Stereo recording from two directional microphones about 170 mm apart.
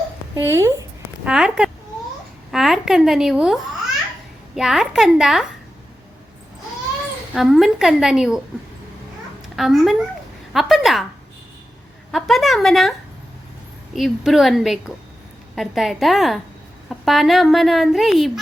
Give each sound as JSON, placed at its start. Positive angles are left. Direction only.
{"t": 0.3, "sound": "a child's voice", "side_deg": -15}
{"t": 1.2, "sound": "speech", "side_deg": -5}
{"t": 7.3, "sound": "speech", "side_deg": 0}
{"t": 9.6, "sound": "speech", "side_deg": 0}
{"t": 12.1, "sound": "speech", "side_deg": 0}
{"t": 13.9, "sound": "speech", "side_deg": 0}